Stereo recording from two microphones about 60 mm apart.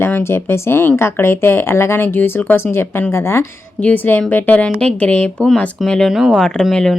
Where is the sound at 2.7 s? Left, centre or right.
Left.